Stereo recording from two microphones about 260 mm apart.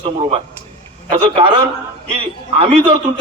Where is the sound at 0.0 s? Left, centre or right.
Right.